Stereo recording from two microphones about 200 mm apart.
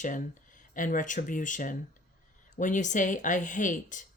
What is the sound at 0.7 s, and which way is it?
Speech, 40° left (ahead or behind).